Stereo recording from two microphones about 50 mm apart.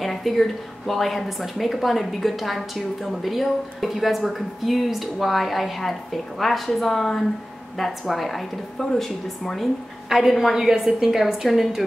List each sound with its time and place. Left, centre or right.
0.0 s a woman's voice: centre
10.0 s a woman's voice: centre